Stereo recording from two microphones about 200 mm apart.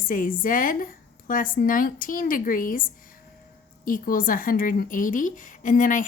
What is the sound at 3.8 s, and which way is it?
A woman's voice, 45° left (ahead or behind).